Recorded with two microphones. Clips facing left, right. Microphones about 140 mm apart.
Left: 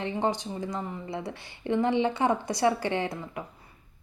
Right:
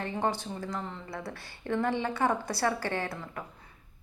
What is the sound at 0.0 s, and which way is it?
Speech, 15° left (ahead or behind).